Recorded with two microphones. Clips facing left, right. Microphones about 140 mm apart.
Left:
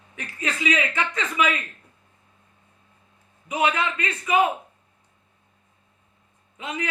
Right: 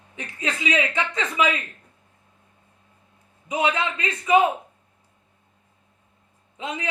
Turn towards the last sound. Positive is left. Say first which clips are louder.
# even
turn(degrees=-25)  # may be behind; listen again after turning